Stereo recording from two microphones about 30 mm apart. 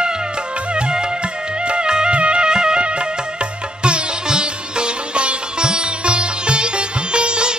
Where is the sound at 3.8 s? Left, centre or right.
Right.